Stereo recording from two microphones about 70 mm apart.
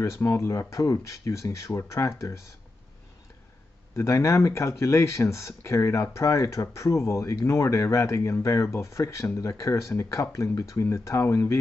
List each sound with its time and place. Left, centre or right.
0.0 s speech: left
3.9 s speech: left